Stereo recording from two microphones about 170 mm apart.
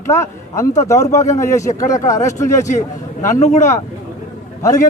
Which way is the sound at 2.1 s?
20° left (ahead or behind).